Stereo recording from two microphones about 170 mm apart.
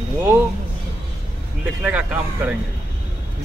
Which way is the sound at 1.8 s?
5° right (ahead or behind).